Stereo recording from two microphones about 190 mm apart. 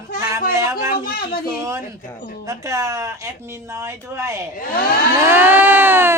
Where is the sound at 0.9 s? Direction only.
50° left (ahead or behind).